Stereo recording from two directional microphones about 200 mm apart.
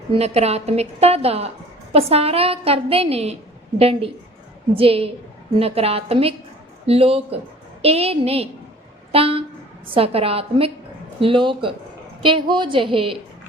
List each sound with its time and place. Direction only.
0.1 s a woman's voice: 30° right (ahead or behind)